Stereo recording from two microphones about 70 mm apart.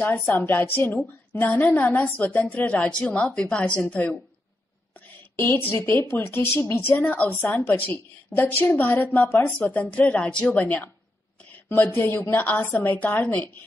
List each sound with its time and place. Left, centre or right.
0.3 s a woman's voice: left
5.3 s a woman's voice: left
7.0 s a woman's voice: left